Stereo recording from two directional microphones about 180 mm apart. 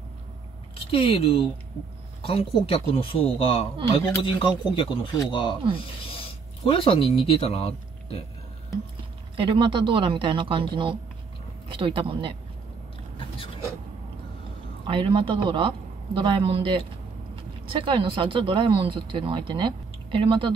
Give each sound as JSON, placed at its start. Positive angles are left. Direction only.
{"t": 0.9, "sound": "speech", "side_deg": 30}
{"t": 9.4, "sound": "a man's voice", "side_deg": -30}
{"t": 11.7, "sound": "a man's voice", "side_deg": -30}
{"t": 14.9, "sound": "a man's voice", "side_deg": -30}